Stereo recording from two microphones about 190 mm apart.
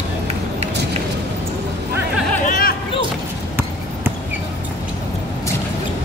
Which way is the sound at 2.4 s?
45° left (ahead or behind).